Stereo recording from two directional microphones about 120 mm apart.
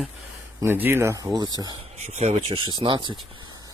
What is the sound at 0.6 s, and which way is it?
Speech, 20° right (ahead or behind).